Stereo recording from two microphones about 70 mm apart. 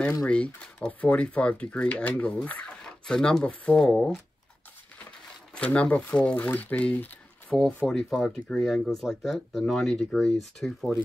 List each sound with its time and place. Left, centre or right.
0.2 s speech: centre
5.5 s speech: centre
7.5 s speech: centre